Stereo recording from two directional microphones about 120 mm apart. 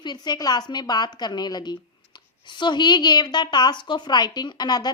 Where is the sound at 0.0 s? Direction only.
35° left (ahead or behind).